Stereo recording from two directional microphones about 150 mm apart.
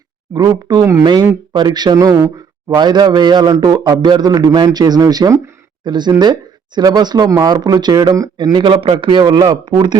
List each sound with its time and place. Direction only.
0.3 s speech: 25° right (ahead or behind)